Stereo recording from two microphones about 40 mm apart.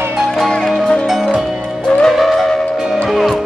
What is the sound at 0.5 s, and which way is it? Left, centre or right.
Music, centre.